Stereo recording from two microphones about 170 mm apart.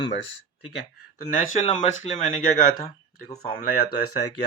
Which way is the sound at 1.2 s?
55° left (ahead or behind).